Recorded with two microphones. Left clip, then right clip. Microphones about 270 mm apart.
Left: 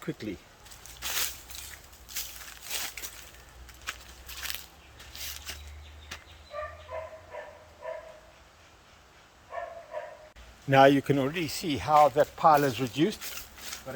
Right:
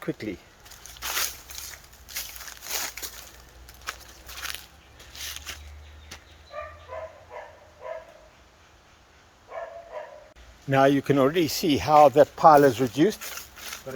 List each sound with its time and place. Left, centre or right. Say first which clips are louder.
0.0 s speech: right 5 dB; centre
1.0 s a sound: right 4 dB; centre
5.2 s a sound: right 4 dB; centre
6.1 s bow-wow: left 2 dB; centre
10.7 s speech: even; centre
11.2 s speech: right 8 dB; right
13.9 s speech: right 3 dB; centre